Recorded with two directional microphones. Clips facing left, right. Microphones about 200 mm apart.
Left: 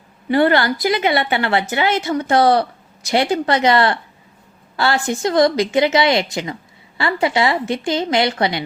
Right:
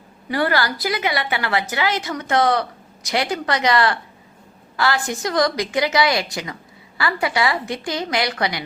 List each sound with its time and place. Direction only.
0.3 s a woman's voice: 25° left (ahead or behind)